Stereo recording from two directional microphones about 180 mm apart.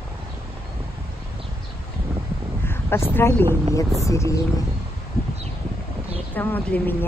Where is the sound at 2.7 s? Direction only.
15° left (ahead or behind).